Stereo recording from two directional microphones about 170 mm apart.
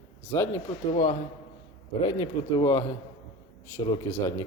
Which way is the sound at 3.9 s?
25° left (ahead or behind).